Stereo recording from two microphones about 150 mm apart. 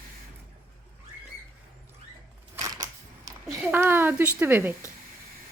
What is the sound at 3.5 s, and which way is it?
A woman's voice, 15° right (ahead or behind).